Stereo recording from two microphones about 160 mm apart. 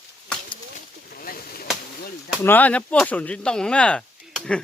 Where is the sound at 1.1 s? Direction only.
65° left (ahead or behind).